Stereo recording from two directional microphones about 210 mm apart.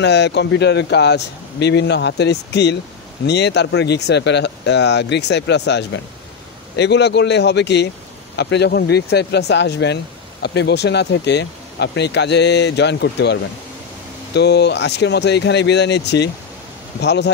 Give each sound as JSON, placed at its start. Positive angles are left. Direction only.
{"t": 0.0, "sound": "speech", "side_deg": 55}